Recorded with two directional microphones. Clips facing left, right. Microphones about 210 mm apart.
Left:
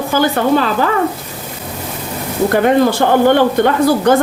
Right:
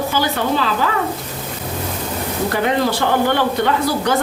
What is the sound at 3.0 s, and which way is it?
Speech, 45° left (ahead or behind).